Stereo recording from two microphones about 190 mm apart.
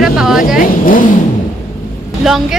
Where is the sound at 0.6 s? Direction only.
45° left (ahead or behind).